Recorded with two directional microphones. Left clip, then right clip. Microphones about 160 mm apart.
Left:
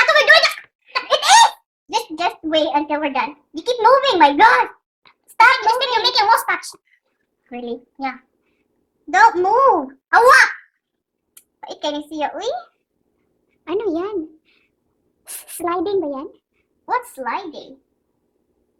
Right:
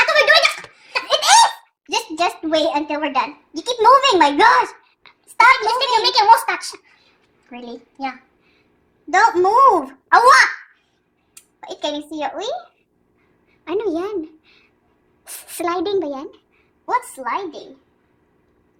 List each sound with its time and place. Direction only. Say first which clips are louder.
0.0 s a sound: left 1 dB; 5° left (ahead or behind)
1.1 s laughter: left 1 dB; 20° left (ahead or behind)
1.9 s a child's voice: right 1 dB; 20° left (ahead or behind)
5.0 s a sound: right 2 dB; 10° left (ahead or behind)
5.5 s a child's voice: even; 5° left (ahead or behind)
9.1 s speech: even; 20° left (ahead or behind)
11.3 s a sound: right 1 dB; 20° left (ahead or behind)
11.9 s speech: left 1 dB; 20° left (ahead or behind)
13.7 s a woman's voice: even; 5° left (ahead or behind)
16.8 s speech: even; 20° left (ahead or behind)